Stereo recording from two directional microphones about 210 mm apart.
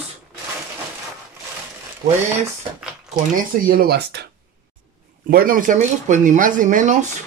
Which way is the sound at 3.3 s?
45° right (ahead or behind).